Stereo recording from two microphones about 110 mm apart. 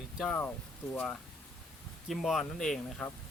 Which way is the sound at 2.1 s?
Centre (ahead or behind).